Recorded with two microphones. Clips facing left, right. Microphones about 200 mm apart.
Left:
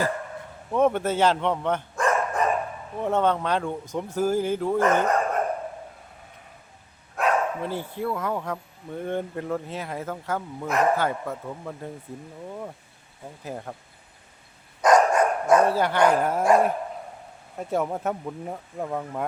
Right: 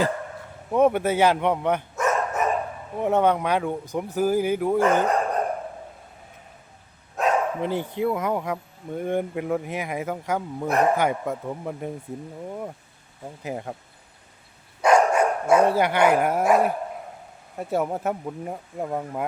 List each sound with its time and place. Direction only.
0.7 s speech: 10° right (ahead or behind)
7.2 s speech: 20° right (ahead or behind)
13.4 s speech: 15° right (ahead or behind)
14.8 s speech: 10° right (ahead or behind)